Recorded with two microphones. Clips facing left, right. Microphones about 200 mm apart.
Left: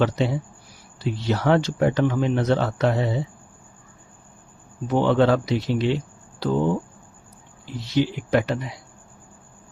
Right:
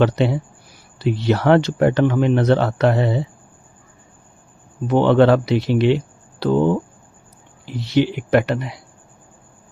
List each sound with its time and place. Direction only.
0.0 s speech: 65° right (ahead or behind)
4.9 s speech: 65° right (ahead or behind)